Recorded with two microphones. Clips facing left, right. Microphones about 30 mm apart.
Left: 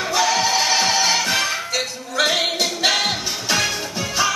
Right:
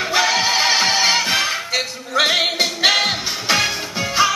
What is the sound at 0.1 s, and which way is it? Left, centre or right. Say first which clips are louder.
Music: right 1 dB; right.